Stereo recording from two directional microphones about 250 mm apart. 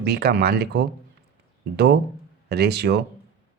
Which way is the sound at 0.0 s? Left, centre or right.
Right.